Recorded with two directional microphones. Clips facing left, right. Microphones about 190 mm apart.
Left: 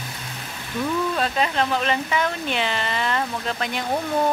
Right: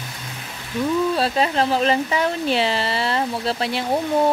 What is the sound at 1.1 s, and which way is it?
Speech, 35° right (ahead or behind).